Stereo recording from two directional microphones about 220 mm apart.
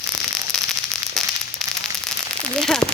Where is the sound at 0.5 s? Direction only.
Centre (ahead or behind).